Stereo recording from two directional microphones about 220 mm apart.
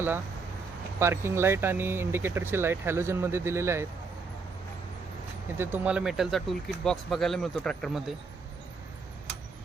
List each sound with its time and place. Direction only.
0.9 s speech: 10° right (ahead or behind)
5.5 s speech: 5° right (ahead or behind)